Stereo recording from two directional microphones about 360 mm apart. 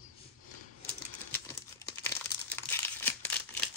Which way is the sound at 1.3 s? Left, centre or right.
Centre.